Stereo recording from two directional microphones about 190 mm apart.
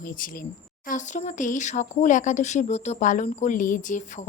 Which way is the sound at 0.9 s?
40° left (ahead or behind).